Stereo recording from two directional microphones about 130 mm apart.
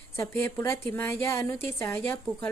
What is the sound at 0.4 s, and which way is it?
A woman's voice, 20° left (ahead or behind).